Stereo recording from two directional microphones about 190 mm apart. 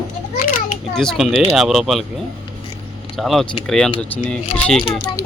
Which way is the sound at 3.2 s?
Centre (ahead or behind).